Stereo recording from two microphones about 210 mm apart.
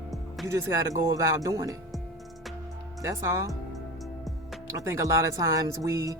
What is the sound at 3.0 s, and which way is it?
Speech, 15° right (ahead or behind).